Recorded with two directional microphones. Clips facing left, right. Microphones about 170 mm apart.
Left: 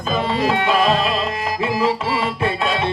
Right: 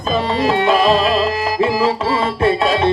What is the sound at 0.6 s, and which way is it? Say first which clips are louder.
Music: right 4 dB; 35° right (ahead or behind).